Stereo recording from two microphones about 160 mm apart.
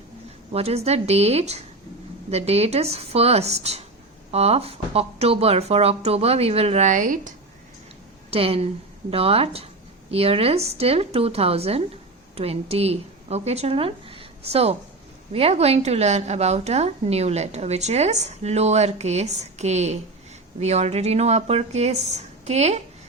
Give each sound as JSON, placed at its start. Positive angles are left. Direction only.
{"t": 0.5, "sound": "speech", "side_deg": -40}
{"t": 8.3, "sound": "a woman's voice", "side_deg": -35}